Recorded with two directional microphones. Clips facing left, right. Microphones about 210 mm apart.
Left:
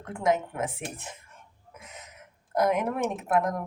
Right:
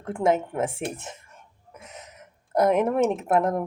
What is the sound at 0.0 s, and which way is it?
Speech, 30° right (ahead or behind).